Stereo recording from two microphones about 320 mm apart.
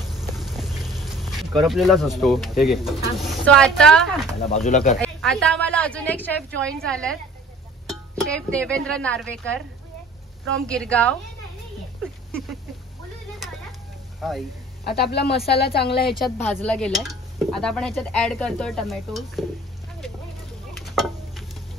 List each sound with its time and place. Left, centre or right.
0.0 s a sound: centre
3.2 s dishes: centre
4.4 s speech: centre
5.0 s dishes: centre
7.8 s speech: centre
10.7 s dishes: centre
14.2 s dishes: centre
14.9 s speech: left
16.1 s dishes: centre
20.8 s a sound: centre